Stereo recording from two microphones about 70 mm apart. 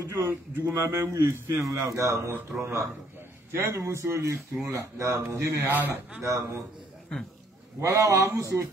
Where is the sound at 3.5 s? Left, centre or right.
Right.